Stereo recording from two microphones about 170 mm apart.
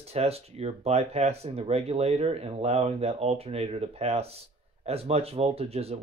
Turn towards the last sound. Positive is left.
turn(degrees=-35)  # may be behind; listen again after turning